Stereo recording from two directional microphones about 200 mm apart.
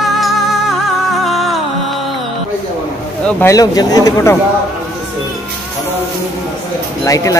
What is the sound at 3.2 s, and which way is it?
Speech, 15° left (ahead or behind).